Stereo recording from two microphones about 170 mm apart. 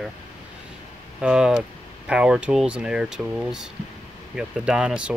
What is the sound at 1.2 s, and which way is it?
Speech, 5° right (ahead or behind).